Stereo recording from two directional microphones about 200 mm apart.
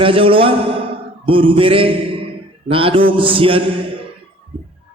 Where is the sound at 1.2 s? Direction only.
25° right (ahead or behind).